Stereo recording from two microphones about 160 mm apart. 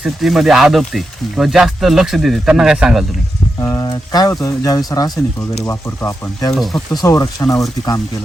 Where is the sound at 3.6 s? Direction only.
20° left (ahead or behind).